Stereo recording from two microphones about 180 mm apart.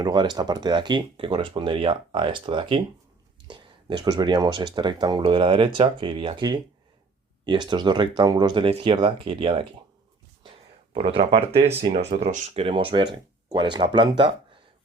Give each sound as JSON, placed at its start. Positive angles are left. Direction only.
{"t": 0.0, "sound": "speech", "side_deg": -25}
{"t": 10.9, "sound": "speech", "side_deg": -30}